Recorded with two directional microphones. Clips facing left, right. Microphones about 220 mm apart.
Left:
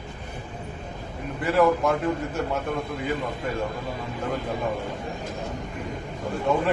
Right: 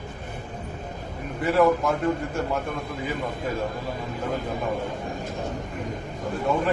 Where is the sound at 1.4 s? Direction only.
Centre (ahead or behind).